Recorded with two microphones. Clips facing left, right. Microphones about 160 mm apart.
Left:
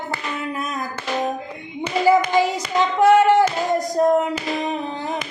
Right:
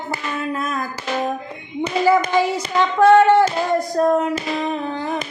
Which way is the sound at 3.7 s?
20° left (ahead or behind).